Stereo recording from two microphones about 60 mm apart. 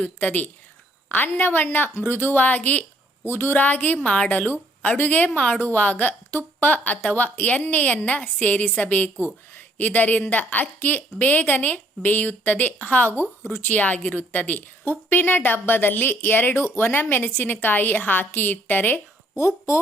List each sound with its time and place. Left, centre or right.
0.0 s a woman's voice: left
3.2 s a woman's voice: left
13.7 s a woman's voice: left
19.4 s speech: left